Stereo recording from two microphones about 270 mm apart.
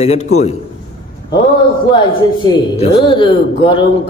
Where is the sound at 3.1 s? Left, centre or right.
Centre.